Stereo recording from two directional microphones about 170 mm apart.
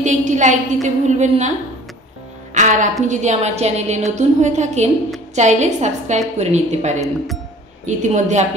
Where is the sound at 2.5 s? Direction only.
45° right (ahead or behind).